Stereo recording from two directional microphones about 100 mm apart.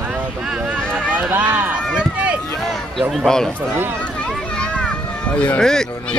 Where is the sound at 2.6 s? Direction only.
Centre (ahead or behind).